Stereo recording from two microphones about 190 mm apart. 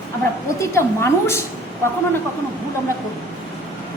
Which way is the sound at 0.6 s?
15° left (ahead or behind).